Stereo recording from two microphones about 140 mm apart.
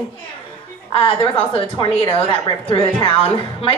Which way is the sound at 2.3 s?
35° left (ahead or behind).